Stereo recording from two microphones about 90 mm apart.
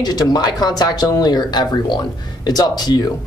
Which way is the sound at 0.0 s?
50° left (ahead or behind).